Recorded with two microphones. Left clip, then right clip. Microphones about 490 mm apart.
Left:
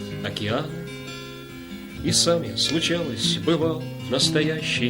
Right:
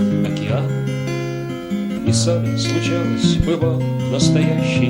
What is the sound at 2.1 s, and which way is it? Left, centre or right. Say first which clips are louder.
Music: even; centre.